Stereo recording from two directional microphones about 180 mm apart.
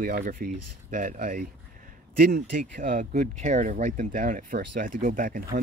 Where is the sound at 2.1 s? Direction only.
60° right (ahead or behind).